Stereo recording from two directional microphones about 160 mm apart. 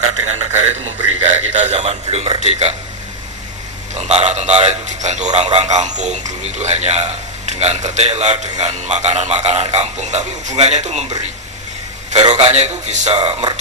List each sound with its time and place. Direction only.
0.0 s a man's voice: 45° right (ahead or behind)
2.4 s a man's voice: 45° right (ahead or behind)
3.9 s a man's voice: 40° right (ahead or behind)
12.3 s a man's voice: 40° right (ahead or behind)